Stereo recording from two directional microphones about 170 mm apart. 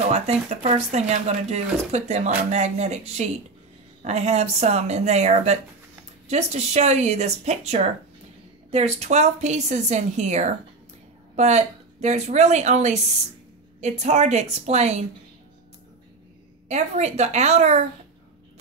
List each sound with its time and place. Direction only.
0.1 s a woman's voice: 40° right (ahead or behind)
16.6 s speech: 40° right (ahead or behind)